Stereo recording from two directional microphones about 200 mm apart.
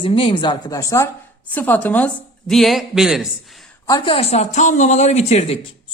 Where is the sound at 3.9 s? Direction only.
30° left (ahead or behind).